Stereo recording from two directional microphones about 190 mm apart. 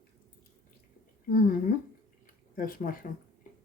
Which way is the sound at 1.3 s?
45° left (ahead or behind).